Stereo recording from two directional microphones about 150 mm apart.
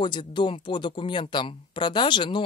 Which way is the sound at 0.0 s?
30° left (ahead or behind).